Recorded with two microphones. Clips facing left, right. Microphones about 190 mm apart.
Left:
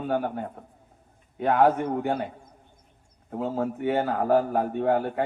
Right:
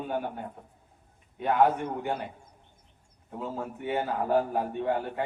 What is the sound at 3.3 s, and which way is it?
A man's voice, 65° left (ahead or behind).